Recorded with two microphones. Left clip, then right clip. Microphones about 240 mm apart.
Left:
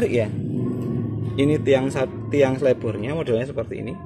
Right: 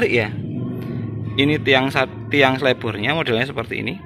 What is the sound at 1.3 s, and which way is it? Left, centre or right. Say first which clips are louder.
Speech: right 3 dB; centre.